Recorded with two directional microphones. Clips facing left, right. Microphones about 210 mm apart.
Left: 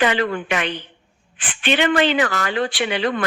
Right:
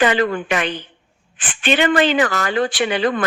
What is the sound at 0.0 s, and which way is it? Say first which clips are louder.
A woman's voice: right 3 dB; 45° right (ahead or behind).